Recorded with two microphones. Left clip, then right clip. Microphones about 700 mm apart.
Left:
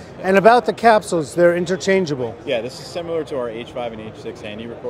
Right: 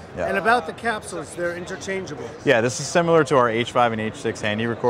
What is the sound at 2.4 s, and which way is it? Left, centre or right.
Speech, right.